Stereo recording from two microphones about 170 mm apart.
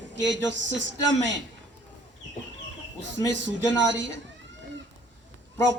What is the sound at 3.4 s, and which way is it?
Speech, 90° right.